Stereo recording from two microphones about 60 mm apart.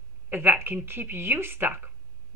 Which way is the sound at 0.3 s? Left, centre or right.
Right.